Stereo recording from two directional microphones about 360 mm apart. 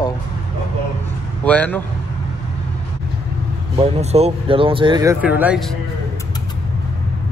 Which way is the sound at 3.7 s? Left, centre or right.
Centre.